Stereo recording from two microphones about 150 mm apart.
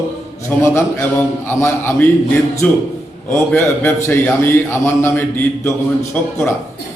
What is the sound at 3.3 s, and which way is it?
A man's voice, 15° left (ahead or behind).